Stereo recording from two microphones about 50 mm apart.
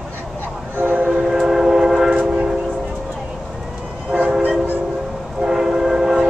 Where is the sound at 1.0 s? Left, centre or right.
Centre.